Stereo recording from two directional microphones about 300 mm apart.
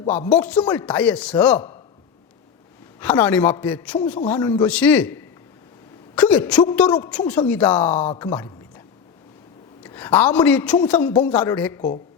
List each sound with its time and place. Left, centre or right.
0.3 s a man's voice: centre
3.0 s a man's voice: centre
9.8 s a man's voice: centre